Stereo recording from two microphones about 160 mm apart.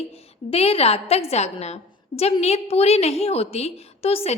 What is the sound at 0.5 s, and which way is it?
A woman's voice, 40° left (ahead or behind).